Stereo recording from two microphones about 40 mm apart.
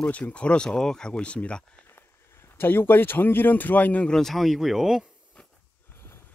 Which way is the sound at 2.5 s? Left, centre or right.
Left.